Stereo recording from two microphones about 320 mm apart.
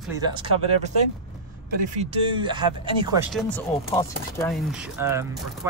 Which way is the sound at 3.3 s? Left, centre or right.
Centre.